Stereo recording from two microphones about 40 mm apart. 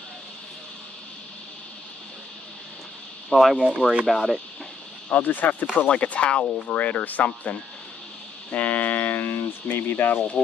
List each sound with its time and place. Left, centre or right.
3.3 s speech: centre
5.1 s speech: left
5.9 s speech: left
6.5 s speech: left
8.5 s a sound: left
9.1 s a sound: left
9.7 s speech: left